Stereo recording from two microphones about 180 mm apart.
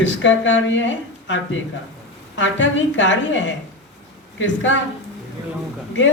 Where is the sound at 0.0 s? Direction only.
90° left.